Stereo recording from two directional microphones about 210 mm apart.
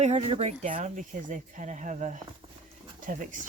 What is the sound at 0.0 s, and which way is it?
Speech, 30° right (ahead or behind).